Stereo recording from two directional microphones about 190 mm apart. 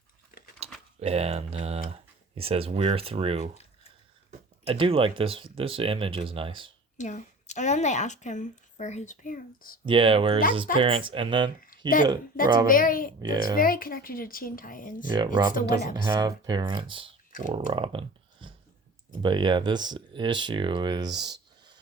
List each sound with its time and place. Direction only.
0.6 s a sound: 35° right (ahead or behind)
0.9 s speech: 35° right (ahead or behind)
6.9 s a woman's voice: 40° left (ahead or behind)
9.8 s speech: 30° right (ahead or behind)
12.6 s speech: 45° left (ahead or behind)
13.2 s speech: 20° right (ahead or behind)
13.6 s speech: 50° left (ahead or behind)
15.1 s speech: 25° right (ahead or behind)